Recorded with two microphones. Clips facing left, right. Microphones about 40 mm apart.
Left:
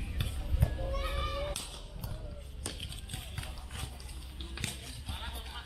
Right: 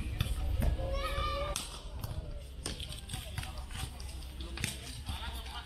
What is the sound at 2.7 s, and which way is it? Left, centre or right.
Horse, centre.